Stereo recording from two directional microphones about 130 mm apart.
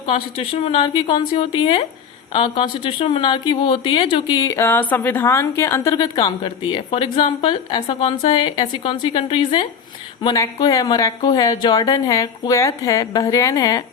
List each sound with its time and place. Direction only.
0.0 s a woman's voice: 45° left (ahead or behind)
10.3 s a woman's voice: 30° left (ahead or behind)